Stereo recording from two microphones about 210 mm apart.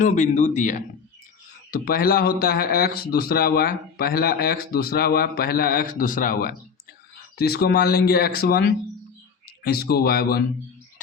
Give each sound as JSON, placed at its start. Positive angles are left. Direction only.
{"t": 0.0, "sound": "a man's voice", "side_deg": 35}